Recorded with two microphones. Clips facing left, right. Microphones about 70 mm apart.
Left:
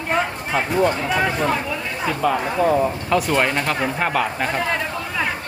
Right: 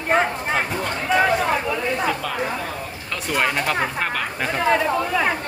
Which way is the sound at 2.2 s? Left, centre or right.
Centre.